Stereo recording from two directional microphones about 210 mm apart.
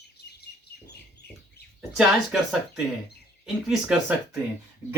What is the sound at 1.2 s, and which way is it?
Chicken, 50° left (ahead or behind).